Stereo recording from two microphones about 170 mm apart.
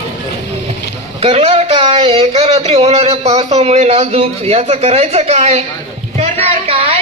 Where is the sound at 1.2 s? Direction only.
35° right (ahead or behind).